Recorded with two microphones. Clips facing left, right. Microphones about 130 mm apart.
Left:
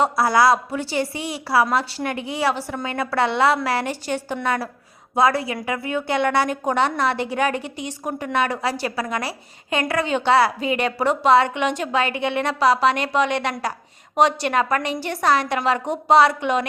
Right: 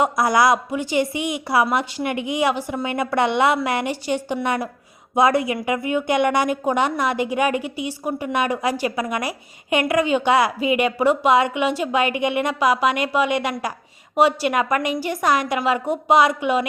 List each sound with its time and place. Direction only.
0.0 s a woman's voice: 20° right (ahead or behind)